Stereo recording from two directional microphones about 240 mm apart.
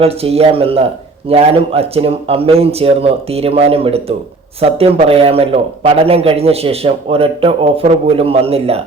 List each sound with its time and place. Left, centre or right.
0.0 s a man's voice: right